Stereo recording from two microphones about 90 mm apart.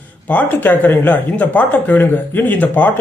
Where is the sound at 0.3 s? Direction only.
20° left (ahead or behind).